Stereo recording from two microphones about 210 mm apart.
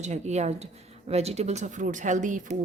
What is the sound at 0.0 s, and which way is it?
Speech, 35° right (ahead or behind).